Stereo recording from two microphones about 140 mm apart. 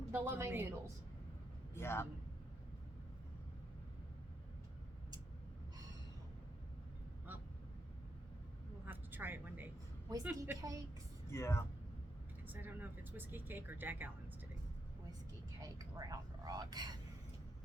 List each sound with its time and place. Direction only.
0.1 s speech: 15° right (ahead or behind)
1.7 s a man's voice: 15° left (ahead or behind)
8.9 s vehicle: 15° right (ahead or behind)
10.2 s speech: 15° right (ahead or behind)
11.3 s speech: 20° left (ahead or behind)
12.5 s speech: 15° right (ahead or behind)
15.6 s speech: 25° right (ahead or behind)